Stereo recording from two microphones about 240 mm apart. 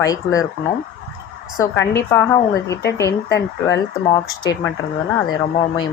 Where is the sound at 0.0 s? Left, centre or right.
Centre.